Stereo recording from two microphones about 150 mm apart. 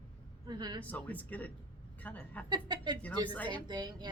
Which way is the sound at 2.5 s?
30° right (ahead or behind).